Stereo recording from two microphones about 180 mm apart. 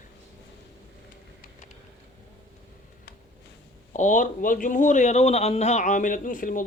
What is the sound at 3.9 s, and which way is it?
Speech, 45° left (ahead or behind).